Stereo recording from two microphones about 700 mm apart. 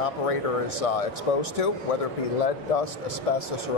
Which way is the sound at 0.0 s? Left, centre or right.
Left.